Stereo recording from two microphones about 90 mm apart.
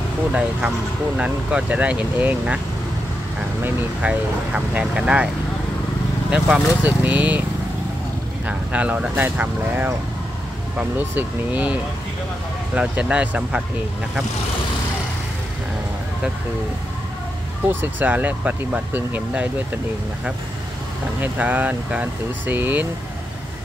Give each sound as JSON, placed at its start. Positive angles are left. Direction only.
{"t": 0.3, "sound": "speech", "side_deg": -10}
{"t": 4.0, "sound": "speech", "side_deg": -15}
{"t": 6.3, "sound": "speech", "side_deg": -10}
{"t": 8.5, "sound": "speech", "side_deg": -15}
{"t": 17.6, "sound": "speech", "side_deg": -20}
{"t": 21.2, "sound": "speech", "side_deg": -20}